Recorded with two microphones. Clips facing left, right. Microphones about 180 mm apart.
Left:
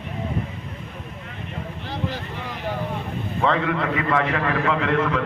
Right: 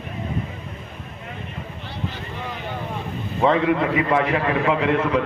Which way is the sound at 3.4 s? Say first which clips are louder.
Right 4 dB; 15° right (ahead or behind).